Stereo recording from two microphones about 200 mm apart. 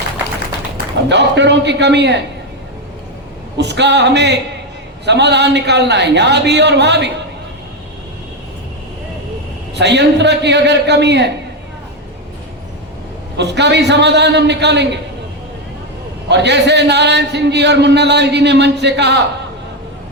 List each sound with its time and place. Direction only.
1.1 s a man's voice: 60° right (ahead or behind)
3.6 s a man's voice: 60° right (ahead or behind)
9.7 s a man's voice: 60° right (ahead or behind)
13.3 s a man's voice: 60° right (ahead or behind)
16.3 s a man's voice: 60° right (ahead or behind)